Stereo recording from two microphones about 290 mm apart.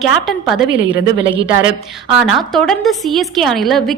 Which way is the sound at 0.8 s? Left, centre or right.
Centre.